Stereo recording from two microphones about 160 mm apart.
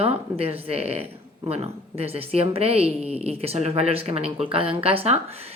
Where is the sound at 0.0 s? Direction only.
40° right (ahead or behind).